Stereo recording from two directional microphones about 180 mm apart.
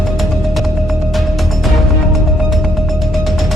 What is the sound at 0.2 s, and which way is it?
Music, centre (ahead or behind).